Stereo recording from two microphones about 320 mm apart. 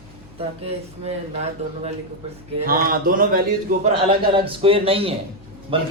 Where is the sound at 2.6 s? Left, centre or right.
Right.